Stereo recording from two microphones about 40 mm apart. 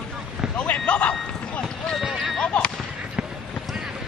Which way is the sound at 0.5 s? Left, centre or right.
Left.